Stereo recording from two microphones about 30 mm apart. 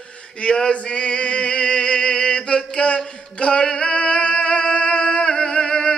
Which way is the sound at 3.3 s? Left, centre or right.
Left.